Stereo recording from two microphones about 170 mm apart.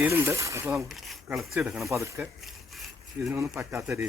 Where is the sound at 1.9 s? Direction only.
15° right (ahead or behind).